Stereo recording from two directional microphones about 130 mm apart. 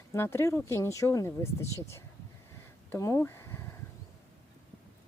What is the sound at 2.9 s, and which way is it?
Speech, 25° left (ahead or behind).